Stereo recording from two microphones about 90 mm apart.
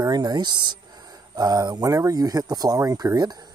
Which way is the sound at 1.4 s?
45° right (ahead or behind).